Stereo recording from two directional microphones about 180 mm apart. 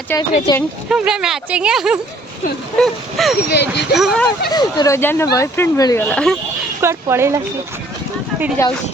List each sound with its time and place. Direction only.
0.1 s speech: 15° left (ahead or behind)
0.9 s speech: 5° right (ahead or behind)
3.5 s speech: 65° left (ahead or behind)
3.9 s speech: centre (ahead or behind)
4.5 s speech: 20° left (ahead or behind)
6.1 s speech: 5° left (ahead or behind)
6.8 s speech: 15° right (ahead or behind)